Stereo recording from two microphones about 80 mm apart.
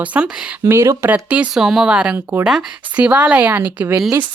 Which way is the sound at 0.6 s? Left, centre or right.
Right.